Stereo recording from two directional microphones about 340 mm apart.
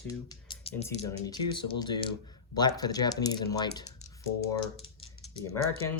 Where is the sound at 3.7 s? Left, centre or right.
Centre.